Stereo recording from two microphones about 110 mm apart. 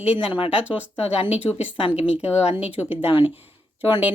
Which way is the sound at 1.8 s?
50° left (ahead or behind).